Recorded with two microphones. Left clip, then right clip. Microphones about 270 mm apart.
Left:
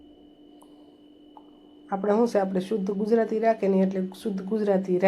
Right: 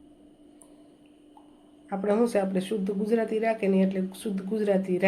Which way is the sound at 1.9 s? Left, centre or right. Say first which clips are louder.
Left 2 dB; centre.